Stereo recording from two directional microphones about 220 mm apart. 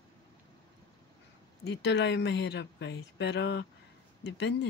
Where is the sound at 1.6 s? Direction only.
50° left (ahead or behind).